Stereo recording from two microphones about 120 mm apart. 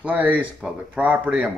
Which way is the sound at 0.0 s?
15° right (ahead or behind).